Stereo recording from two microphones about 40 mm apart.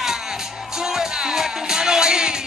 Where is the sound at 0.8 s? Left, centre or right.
Centre.